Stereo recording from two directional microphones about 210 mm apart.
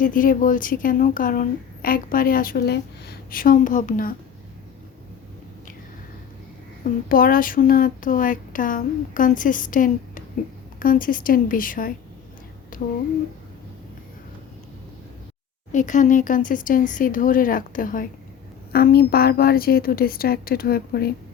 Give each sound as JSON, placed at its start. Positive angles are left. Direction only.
{"t": 0.0, "sound": "a woman's voice", "side_deg": 40}
{"t": 6.8, "sound": "a woman's voice", "side_deg": 45}
{"t": 12.7, "sound": "a sound", "side_deg": 40}
{"t": 15.7, "sound": "a woman's voice", "side_deg": 35}